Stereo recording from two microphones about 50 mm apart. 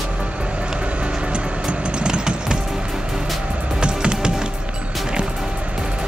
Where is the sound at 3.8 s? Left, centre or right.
Centre.